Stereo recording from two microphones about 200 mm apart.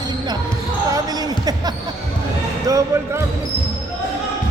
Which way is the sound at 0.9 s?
20° right (ahead or behind).